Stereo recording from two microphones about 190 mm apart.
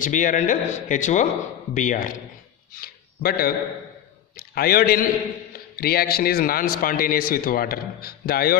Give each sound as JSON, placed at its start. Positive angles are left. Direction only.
{"t": 0.0, "sound": "a man's voice", "side_deg": 45}